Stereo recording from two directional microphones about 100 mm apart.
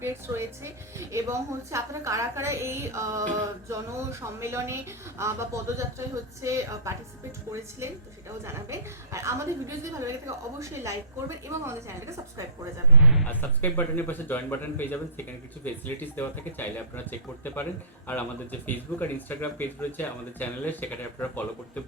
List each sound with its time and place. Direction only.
0.0 s a woman's voice: 25° right (ahead or behind)
8.4 s a woman's voice: 25° right (ahead or behind)
13.0 s speech: 5° right (ahead or behind)
13.2 s speech: 20° left (ahead or behind)